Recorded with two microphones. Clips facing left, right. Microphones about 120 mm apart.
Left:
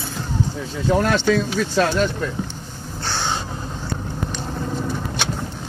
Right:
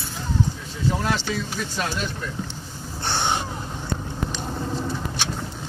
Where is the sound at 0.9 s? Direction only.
65° left (ahead or behind); by 2.1 s 90° left.